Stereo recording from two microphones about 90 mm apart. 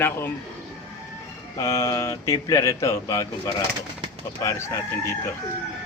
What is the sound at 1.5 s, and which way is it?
Speech, 40° left (ahead or behind).